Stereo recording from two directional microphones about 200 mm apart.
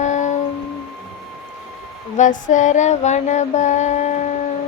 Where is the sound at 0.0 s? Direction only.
35° left (ahead or behind).